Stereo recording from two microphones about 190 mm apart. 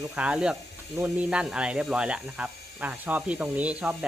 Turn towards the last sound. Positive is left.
turn(degrees=-5)  # may be behind; listen again after turning